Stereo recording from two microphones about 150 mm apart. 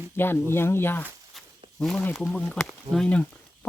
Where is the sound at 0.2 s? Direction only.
15° left (ahead or behind).